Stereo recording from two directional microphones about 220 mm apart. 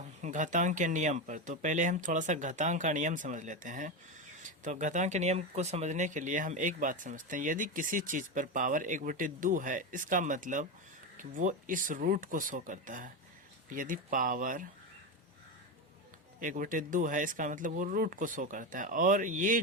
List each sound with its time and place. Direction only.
0.0 s speech: 35° right (ahead or behind)
16.4 s speech: 35° right (ahead or behind)